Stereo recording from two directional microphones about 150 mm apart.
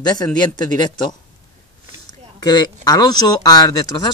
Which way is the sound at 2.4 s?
25° left (ahead or behind).